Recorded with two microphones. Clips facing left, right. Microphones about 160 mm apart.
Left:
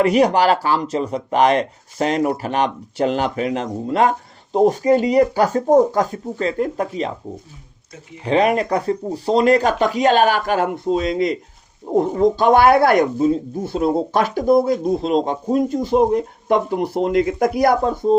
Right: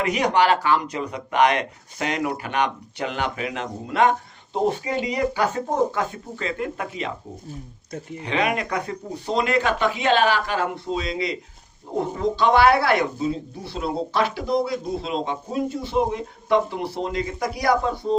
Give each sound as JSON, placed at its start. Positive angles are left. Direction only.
{"t": 0.0, "sound": "speech", "side_deg": 35}
{"t": 8.2, "sound": "speech", "side_deg": 35}